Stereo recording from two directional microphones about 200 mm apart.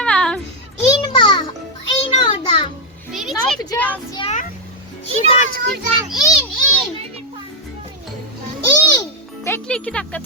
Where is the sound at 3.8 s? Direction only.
10° left (ahead or behind).